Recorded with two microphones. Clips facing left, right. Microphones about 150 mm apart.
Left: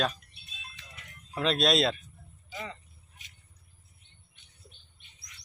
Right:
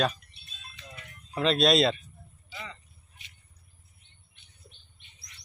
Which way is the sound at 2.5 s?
45° left (ahead or behind).